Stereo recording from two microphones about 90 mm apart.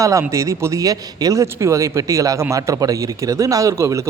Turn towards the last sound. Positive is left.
turn(degrees=-35)  # may be behind; listen again after turning